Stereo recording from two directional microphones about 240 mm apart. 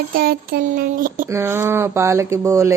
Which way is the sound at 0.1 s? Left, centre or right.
Right.